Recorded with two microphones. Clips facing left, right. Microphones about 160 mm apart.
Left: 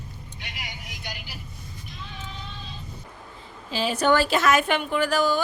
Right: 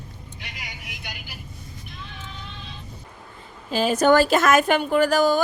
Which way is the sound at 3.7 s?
45° right (ahead or behind).